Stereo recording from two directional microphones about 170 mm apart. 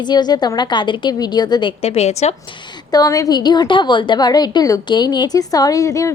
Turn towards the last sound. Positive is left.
turn(degrees=20)  # may be behind; listen again after turning